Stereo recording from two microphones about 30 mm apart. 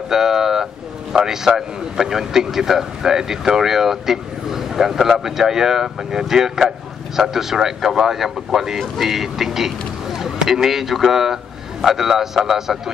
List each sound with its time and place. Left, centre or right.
0.1 s speech: centre